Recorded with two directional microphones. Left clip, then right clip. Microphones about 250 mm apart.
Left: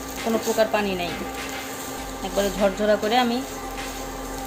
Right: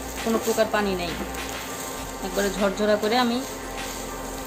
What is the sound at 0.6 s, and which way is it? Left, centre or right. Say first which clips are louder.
Speech: left 1 dB; centre.